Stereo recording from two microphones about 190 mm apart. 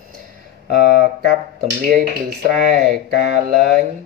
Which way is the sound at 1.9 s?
55° right (ahead or behind).